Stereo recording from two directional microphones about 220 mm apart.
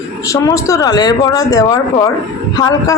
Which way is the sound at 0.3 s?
15° left (ahead or behind).